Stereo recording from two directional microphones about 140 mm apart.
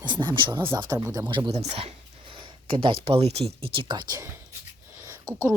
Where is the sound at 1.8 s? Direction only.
40° right (ahead or behind).